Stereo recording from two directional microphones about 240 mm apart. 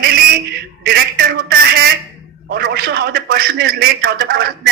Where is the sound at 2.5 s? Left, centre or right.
Right.